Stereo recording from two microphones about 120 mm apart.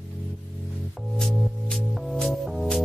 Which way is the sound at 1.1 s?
5° left (ahead or behind).